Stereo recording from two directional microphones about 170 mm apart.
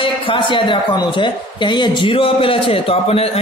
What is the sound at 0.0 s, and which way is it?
A woman's voice, 30° left (ahead or behind).